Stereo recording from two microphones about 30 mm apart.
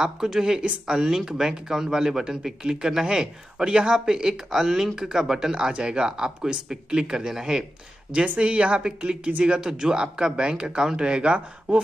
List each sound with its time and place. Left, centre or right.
0.0 s a man's voice: centre
5.7 s speech: right; by 7.6 s centre
8.1 s speech: right
8.8 s speech: right